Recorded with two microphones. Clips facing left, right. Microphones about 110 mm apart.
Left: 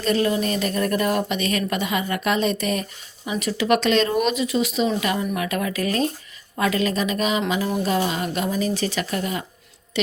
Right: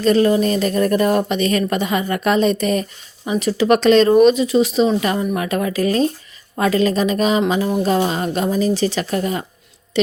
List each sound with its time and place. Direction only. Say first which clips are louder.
0.0 s speech: right 7 dB; 35° right (ahead or behind)